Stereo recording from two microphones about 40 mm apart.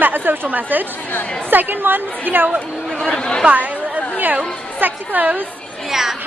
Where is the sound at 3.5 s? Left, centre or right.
Right.